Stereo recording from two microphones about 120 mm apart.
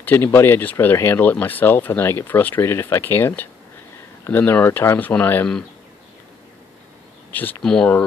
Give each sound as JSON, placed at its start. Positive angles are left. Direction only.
{"t": 0.0, "sound": "speech", "side_deg": 20}
{"t": 7.3, "sound": "speech", "side_deg": 15}